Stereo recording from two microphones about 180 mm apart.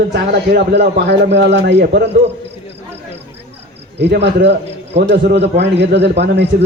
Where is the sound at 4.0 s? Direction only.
70° right (ahead or behind).